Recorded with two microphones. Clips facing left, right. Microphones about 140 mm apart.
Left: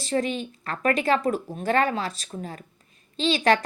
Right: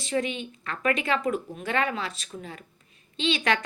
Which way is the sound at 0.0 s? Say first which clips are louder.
Left 3 dB; 40° left (ahead or behind).